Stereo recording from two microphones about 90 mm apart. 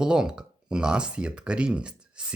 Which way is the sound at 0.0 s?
10° right (ahead or behind).